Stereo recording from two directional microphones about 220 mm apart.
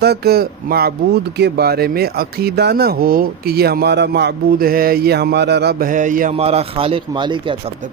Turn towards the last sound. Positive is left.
turn(degrees=-20)  # may be behind; listen again after turning